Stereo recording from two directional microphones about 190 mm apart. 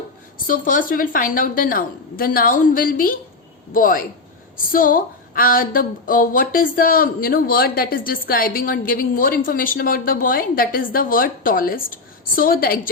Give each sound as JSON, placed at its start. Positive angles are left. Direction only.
{"t": 0.4, "sound": "a woman's voice", "side_deg": 45}